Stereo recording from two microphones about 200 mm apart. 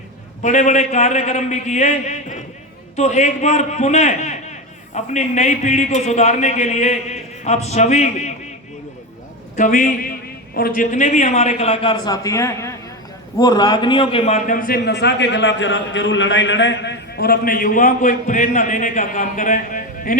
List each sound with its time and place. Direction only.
0.4 s a man's voice: 35° left (ahead or behind)
9.6 s a man's voice: 40° left (ahead or behind)